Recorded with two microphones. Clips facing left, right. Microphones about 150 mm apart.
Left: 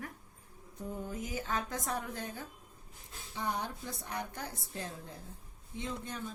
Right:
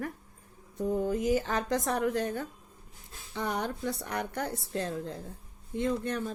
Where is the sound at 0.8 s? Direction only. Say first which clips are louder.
Right 11 dB; 80° right.